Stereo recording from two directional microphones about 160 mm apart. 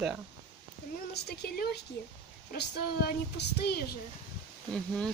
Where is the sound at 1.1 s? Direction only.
90° left.